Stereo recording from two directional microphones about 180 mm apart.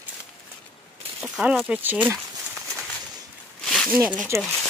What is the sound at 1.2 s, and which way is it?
Speech, 5° right (ahead or behind).